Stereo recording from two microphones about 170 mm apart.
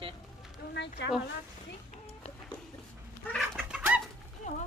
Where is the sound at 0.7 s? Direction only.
90° left.